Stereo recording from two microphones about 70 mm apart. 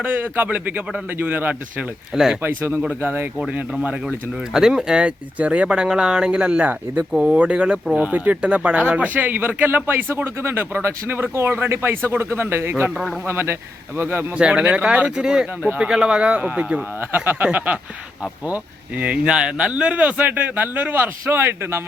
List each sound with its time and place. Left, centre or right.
0.0 s speech: right
2.1 s speech: centre
2.4 s speech: right
4.5 s speech: centre; by 14.3 s right
14.3 s speech: centre
17.0 s speech: right